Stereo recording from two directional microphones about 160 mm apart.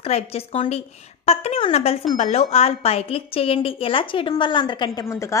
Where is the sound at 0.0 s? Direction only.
40° left (ahead or behind).